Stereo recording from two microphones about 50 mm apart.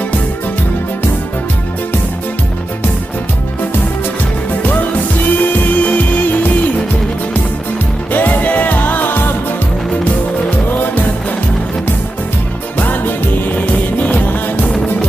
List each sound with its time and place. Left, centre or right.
5.4 s music: left
8.1 s music: left
12.7 s music: left